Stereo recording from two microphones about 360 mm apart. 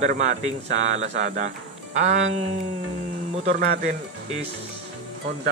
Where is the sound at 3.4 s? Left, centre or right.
Centre.